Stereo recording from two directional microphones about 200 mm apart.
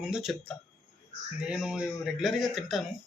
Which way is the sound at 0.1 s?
Centre (ahead or behind).